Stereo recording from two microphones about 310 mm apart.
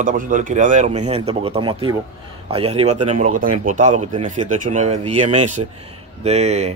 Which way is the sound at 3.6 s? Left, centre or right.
Right.